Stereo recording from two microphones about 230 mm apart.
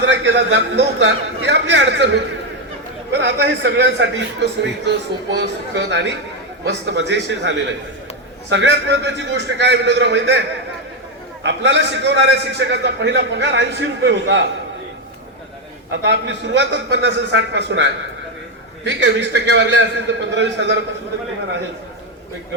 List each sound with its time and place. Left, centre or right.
0.0 s a man's voice: right
11.4 s a man's voice: right
15.9 s a man's voice: right